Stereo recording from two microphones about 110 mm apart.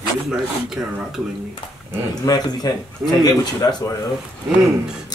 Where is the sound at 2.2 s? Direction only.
35° left (ahead or behind).